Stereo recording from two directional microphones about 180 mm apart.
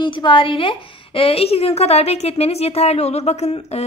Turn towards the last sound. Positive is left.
turn(degrees=35)  # may be behind; listen again after turning